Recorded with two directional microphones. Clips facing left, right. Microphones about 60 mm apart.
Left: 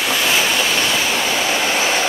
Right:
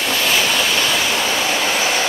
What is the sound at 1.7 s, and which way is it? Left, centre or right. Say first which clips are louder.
Train: left 1 dB; left.